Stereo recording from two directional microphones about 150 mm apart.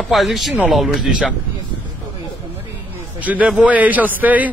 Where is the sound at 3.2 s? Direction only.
10° right (ahead or behind).